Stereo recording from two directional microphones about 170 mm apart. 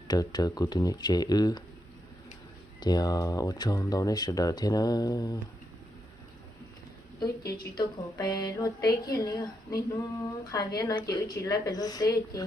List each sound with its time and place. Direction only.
0.1 s a woman's voice: 25° left (ahead or behind)
2.8 s a woman's voice: 25° left (ahead or behind)
7.6 s a woman's voice: 20° left (ahead or behind)